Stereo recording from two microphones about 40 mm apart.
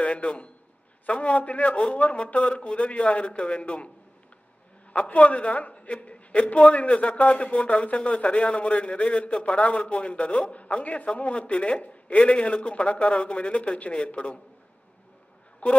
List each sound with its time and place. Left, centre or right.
0.0 s a man's voice: left
4.9 s a man's voice: left
15.6 s speech: left